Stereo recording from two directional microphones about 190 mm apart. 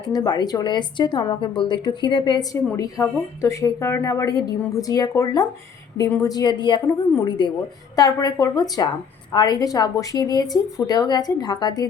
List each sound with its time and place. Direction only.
0.1 s a woman's voice: 20° left (ahead or behind)